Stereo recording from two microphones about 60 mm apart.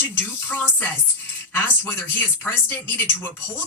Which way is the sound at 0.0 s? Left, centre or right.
Left.